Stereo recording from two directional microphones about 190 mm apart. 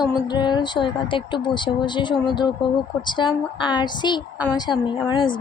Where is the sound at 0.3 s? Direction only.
20° left (ahead or behind).